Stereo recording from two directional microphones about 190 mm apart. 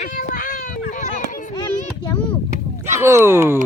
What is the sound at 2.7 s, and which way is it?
Speech, 15° right (ahead or behind).